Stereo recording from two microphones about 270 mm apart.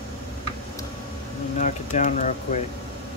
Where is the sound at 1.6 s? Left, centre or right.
Left.